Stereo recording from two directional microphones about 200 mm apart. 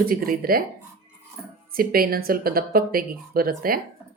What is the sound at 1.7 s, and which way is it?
Speech, 45° right (ahead or behind).